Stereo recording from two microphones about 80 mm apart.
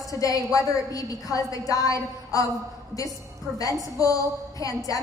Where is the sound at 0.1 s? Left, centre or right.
Left.